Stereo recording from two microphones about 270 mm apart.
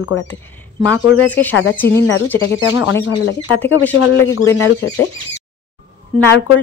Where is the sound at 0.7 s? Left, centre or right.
Centre.